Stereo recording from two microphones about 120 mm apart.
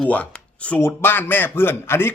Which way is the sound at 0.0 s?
10° left (ahead or behind).